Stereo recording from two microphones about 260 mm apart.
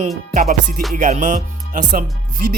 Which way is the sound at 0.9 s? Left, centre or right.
Right.